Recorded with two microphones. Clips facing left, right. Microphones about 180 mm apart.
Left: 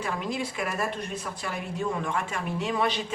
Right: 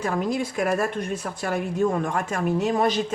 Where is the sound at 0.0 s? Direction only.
45° right (ahead or behind).